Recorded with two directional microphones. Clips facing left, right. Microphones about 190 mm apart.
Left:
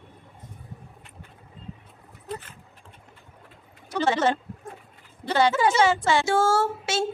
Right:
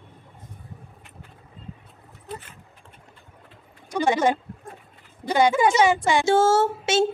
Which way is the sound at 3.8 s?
15° right (ahead or behind).